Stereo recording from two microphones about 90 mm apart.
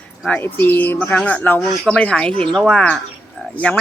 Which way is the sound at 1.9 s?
10° left (ahead or behind).